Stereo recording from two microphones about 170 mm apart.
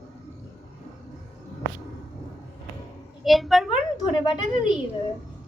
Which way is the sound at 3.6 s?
30° left (ahead or behind).